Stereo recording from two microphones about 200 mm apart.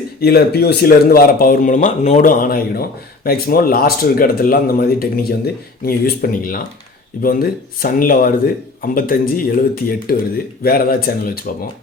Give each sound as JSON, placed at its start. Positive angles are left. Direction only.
{"t": 0.2, "sound": "speech", "side_deg": 55}